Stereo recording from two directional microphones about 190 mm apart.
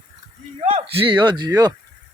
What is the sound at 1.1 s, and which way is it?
Speech, 25° right (ahead or behind).